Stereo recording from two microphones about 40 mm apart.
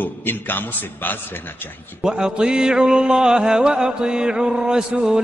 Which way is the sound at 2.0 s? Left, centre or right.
Centre.